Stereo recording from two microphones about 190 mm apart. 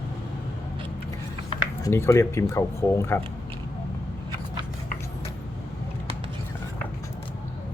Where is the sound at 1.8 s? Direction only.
15° left (ahead or behind).